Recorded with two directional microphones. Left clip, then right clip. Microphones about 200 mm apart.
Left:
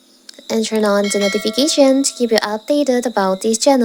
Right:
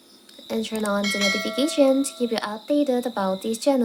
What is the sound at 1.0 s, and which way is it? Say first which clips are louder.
Speech: left 5 dB; centre (ahead or behind).